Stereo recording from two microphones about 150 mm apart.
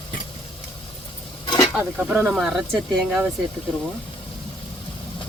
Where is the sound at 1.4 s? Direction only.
35° left (ahead or behind).